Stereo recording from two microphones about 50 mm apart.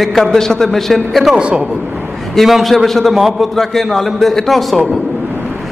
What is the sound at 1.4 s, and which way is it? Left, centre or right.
Speech, right.